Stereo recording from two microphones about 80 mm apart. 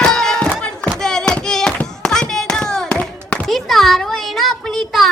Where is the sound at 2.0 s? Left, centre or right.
Centre.